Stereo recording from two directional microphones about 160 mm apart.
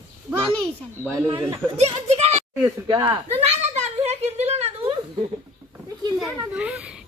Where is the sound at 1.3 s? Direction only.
40° right (ahead or behind).